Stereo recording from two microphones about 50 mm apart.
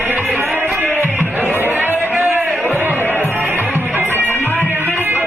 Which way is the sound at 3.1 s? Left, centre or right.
Left.